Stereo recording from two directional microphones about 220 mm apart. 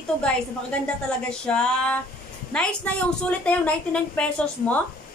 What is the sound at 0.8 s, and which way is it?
A woman's voice, 5° left (ahead or behind).